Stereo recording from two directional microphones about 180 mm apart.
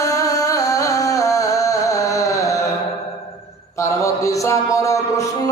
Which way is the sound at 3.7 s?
15° left (ahead or behind).